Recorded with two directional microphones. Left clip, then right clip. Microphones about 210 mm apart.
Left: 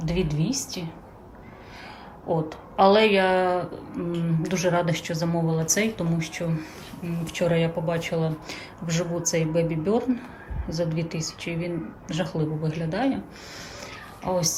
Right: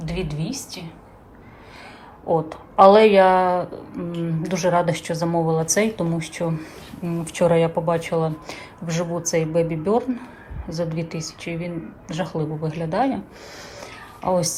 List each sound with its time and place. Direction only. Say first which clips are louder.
0.0 s a woman's voice: left 1 dB; 15° left (ahead or behind)
2.2 s a woman's voice: right 5 dB; 5° left (ahead or behind)
13.8 s a sound: right 6 dB; centre (ahead or behind)